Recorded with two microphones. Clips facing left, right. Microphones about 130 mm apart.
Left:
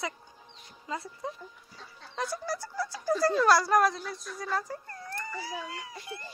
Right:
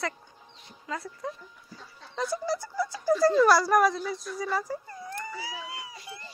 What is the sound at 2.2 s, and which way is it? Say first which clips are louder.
Speech: right 4 dB; 15° right (ahead or behind).